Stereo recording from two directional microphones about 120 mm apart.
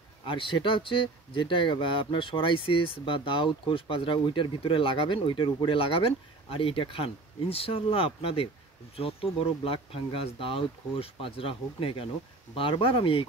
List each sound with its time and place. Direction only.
0.2 s speech: 45° left (ahead or behind)